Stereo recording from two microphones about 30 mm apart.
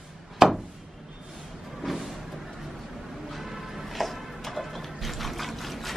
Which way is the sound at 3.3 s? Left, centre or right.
Centre.